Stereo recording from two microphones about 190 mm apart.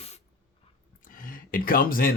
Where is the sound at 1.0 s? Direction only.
45° left (ahead or behind).